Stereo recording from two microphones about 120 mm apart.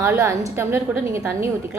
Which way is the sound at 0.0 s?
20° right (ahead or behind).